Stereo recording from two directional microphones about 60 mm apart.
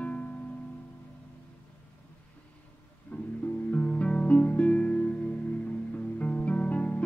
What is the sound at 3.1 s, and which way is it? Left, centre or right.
Music, left.